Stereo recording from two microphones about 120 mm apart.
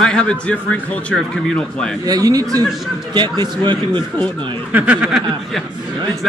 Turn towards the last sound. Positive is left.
turn(degrees=-5)  # may be behind; listen again after turning